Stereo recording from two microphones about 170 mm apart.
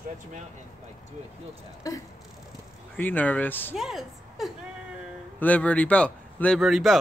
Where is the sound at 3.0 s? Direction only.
10° left (ahead or behind).